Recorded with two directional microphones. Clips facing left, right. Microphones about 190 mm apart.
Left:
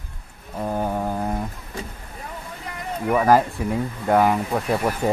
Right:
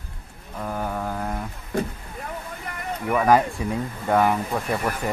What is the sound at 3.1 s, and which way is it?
Speech, 5° left (ahead or behind).